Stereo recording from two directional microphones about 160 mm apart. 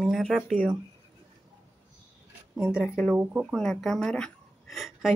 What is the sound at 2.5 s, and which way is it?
Speech, 5° right (ahead or behind).